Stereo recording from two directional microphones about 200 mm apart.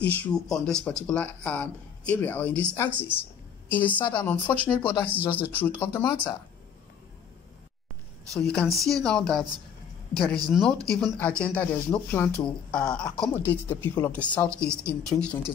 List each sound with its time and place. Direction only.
0.0 s speech: 5° left (ahead or behind)
8.3 s speech: 5° left (ahead or behind)